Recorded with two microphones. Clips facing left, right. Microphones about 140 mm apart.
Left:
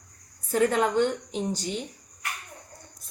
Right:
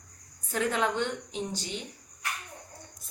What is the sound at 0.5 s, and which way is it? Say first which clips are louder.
A woman's voice: left 6 dB; 45° left (ahead or behind).